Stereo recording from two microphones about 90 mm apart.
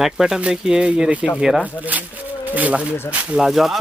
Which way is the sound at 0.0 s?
5° right (ahead or behind).